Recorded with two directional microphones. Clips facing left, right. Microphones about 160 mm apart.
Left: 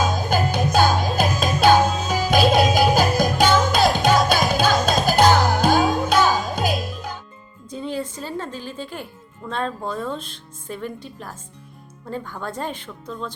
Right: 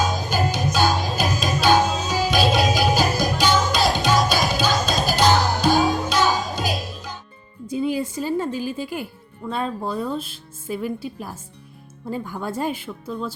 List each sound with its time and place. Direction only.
0.1 s music: 55° left (ahead or behind)
7.7 s music: 10° right (ahead or behind)
9.5 s speech: 5° right (ahead or behind)